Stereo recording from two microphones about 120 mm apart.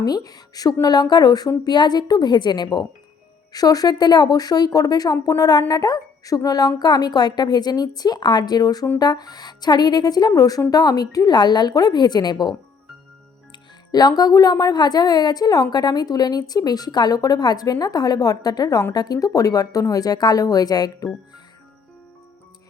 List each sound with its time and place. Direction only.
0.0 s speech: 30° left (ahead or behind)